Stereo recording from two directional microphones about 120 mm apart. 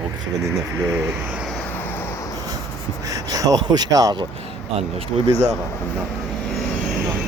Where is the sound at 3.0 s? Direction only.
30° right (ahead or behind).